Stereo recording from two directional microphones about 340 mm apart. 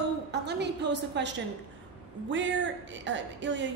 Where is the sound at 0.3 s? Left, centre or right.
Right.